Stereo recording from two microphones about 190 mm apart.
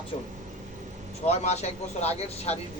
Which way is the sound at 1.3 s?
35° left (ahead or behind).